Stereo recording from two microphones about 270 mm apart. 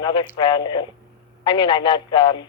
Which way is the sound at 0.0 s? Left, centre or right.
Centre.